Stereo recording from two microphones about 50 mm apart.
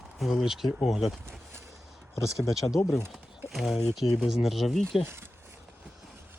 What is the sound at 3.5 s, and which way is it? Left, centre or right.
Speech, centre.